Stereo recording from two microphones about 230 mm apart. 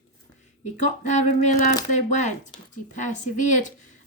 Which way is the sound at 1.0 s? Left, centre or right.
Left.